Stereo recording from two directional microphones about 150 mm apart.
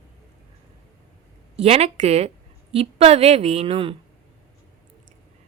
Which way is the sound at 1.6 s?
45° right (ahead or behind).